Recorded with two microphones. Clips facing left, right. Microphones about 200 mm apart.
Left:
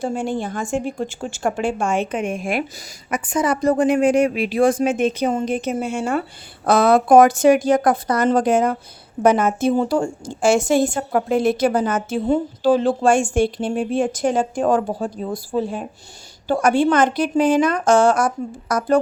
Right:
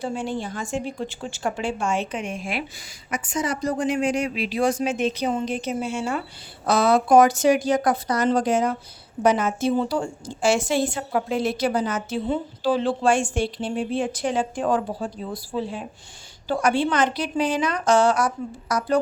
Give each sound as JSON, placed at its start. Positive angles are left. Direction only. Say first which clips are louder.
{"t": 0.0, "sound": "a woman's voice", "louder": "left 4 dB", "side_deg": 50}